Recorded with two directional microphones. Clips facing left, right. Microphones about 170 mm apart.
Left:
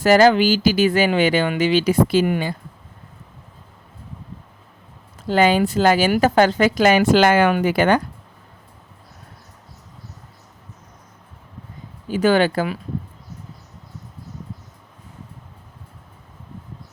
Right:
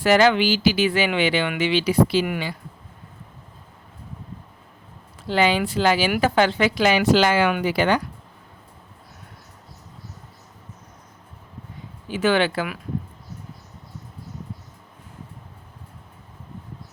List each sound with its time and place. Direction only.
0.0 s speech: 40° left (ahead or behind)
5.3 s speech: 45° left (ahead or behind)
12.0 s speech: 40° left (ahead or behind)